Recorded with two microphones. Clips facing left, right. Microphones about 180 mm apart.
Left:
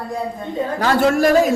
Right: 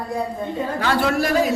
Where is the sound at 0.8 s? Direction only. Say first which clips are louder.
Left 6 dB; 45° left (ahead or behind).